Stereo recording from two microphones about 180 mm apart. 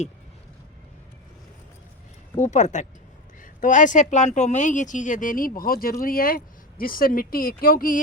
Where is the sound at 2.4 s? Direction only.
40° left (ahead or behind).